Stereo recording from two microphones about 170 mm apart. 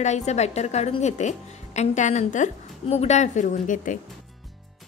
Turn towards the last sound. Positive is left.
turn(degrees=50)  # may be behind; listen again after turning